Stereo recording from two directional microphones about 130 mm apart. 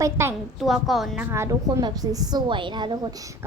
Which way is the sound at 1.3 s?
25° right (ahead or behind).